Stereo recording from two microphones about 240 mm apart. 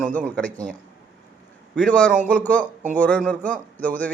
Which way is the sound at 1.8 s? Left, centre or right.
Centre.